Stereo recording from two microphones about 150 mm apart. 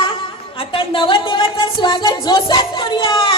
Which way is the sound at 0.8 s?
35° left (ahead or behind).